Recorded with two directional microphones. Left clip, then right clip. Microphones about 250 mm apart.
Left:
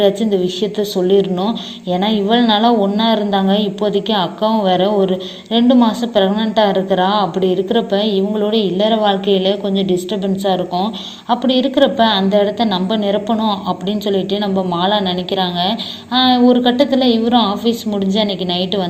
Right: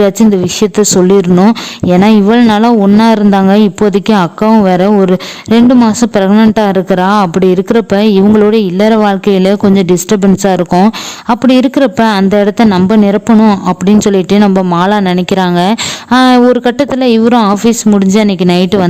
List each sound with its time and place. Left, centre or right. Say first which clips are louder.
0.0 s speech: right 5 dB; right
9.7 s speech: right 7 dB; right
10.1 s speech: right 8 dB; right